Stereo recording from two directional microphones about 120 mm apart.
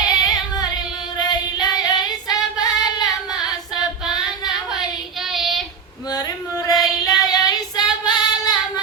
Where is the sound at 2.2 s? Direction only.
35° left (ahead or behind).